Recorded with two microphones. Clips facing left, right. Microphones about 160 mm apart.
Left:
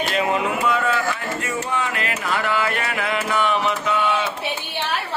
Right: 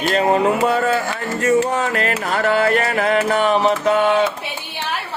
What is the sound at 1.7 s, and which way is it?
Mantra, 40° right (ahead or behind).